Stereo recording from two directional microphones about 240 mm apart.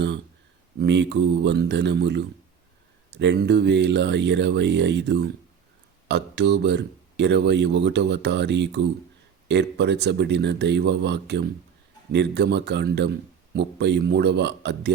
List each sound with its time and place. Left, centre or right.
0.8 s speech: right